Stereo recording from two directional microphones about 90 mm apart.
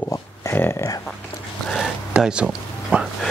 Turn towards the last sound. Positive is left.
turn(degrees=-10)  # may be behind; listen again after turning